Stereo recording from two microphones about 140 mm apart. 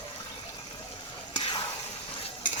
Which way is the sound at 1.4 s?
35° left (ahead or behind).